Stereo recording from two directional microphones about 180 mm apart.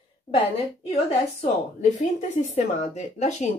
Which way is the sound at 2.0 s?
40° left (ahead or behind).